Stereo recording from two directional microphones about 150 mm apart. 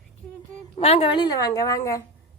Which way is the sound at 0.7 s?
40° left (ahead or behind).